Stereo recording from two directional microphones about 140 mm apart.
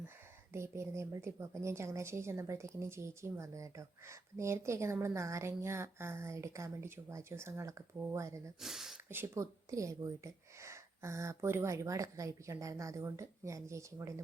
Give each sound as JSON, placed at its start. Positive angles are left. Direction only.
{"t": 0.5, "sound": "a woman's voice", "side_deg": -20}
{"t": 8.6, "sound": "speech", "side_deg": 0}
{"t": 9.0, "sound": "a woman's voice", "side_deg": -20}